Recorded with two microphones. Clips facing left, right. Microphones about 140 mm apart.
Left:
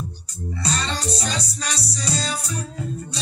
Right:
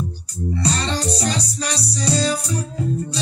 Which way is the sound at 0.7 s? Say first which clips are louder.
Right 2 dB; 30° right (ahead or behind).